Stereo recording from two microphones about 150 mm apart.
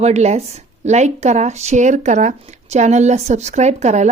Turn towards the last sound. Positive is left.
turn(degrees=-50)  # may be behind; listen again after turning